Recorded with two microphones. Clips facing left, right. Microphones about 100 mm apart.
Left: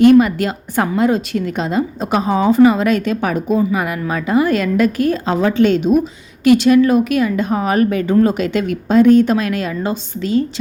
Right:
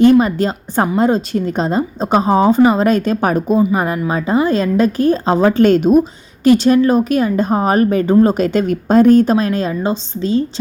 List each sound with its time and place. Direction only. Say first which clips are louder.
0.2 s a woman's voice: even; 30° right (ahead or behind)
6.4 s a woman's voice: even; 35° right (ahead or behind)